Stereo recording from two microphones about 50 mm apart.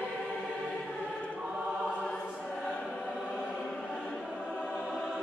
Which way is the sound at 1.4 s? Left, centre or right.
Right.